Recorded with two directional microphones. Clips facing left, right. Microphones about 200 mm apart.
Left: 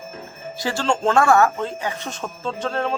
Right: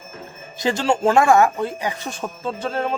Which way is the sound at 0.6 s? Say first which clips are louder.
Right 3 dB; 20° right (ahead or behind).